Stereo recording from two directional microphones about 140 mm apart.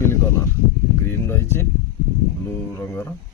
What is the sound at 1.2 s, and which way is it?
Speech, 15° left (ahead or behind).